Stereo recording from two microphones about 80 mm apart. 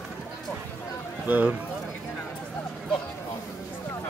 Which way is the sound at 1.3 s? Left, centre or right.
Centre.